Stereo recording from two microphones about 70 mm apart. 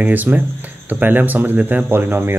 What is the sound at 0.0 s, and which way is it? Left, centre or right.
Speech, right.